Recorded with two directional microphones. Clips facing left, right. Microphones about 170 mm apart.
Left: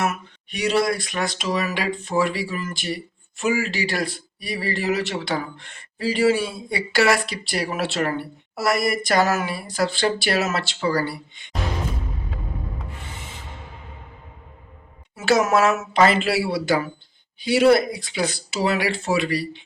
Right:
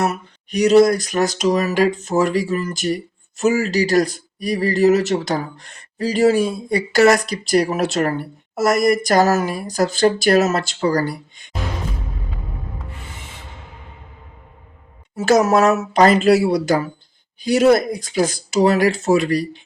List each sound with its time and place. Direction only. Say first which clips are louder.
0.0 s speech: right 4 dB; 40° right (ahead or behind)
15.1 s speech: right 4 dB; 40° right (ahead or behind)